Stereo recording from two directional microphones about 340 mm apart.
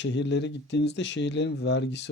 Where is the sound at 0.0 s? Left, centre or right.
Left.